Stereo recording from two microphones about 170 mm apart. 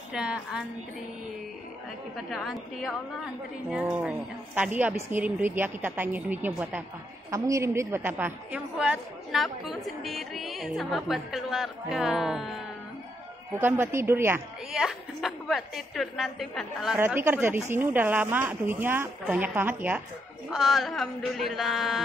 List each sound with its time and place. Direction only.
0.1 s a woman's voice: 5° right (ahead or behind)
2.1 s a woman's voice: centre (ahead or behind)
13.6 s speech: 15° right (ahead or behind)
14.7 s a woman's voice: centre (ahead or behind)
17.0 s speech: 10° right (ahead or behind)
20.4 s a woman's voice: centre (ahead or behind)